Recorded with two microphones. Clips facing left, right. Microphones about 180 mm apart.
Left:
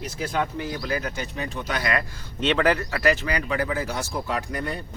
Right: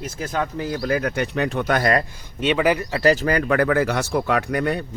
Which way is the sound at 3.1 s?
45° right (ahead or behind).